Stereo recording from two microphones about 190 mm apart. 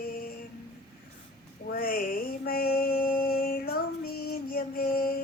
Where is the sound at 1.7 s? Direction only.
50° left (ahead or behind).